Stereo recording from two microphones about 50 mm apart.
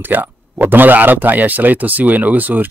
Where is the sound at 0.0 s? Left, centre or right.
Right.